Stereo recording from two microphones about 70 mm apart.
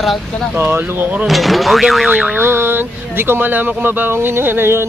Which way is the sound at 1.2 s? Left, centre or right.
Centre.